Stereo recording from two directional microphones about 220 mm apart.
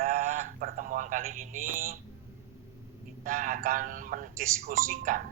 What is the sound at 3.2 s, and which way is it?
Speech, 35° right (ahead or behind).